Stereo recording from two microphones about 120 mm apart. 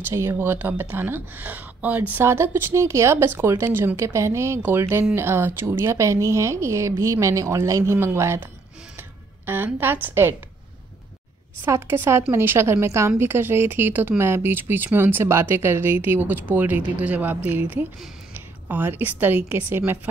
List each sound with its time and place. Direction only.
0.1 s speech: 25° right (ahead or behind)
9.5 s speech: 15° right (ahead or behind)
11.6 s a woman's voice: 20° right (ahead or behind)